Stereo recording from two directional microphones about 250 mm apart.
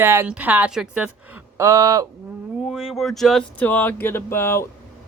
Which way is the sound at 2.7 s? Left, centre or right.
Centre.